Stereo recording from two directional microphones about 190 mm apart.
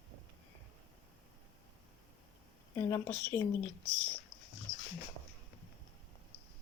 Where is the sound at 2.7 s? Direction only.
15° left (ahead or behind).